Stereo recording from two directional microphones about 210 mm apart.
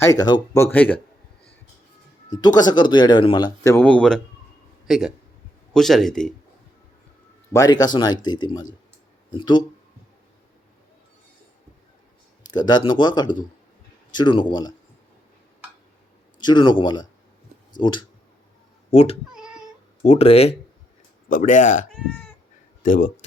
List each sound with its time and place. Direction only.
0.0 s speech: 15° left (ahead or behind)
2.3 s speech: 20° left (ahead or behind); by 6.3 s centre (ahead or behind)
7.5 s speech: 15° left (ahead or behind)
12.5 s speech: 20° left (ahead or behind)
16.4 s speech: 20° left (ahead or behind)
19.3 s cat: 5° right (ahead or behind)
20.0 s speech: 30° left (ahead or behind)
21.9 s speech: 5° left (ahead or behind)
22.8 s speech: 40° left (ahead or behind)